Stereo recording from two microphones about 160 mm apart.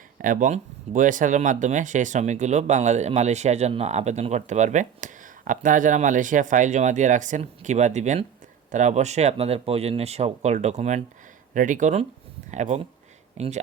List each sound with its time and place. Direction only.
0.2 s speech: 55° right (ahead or behind)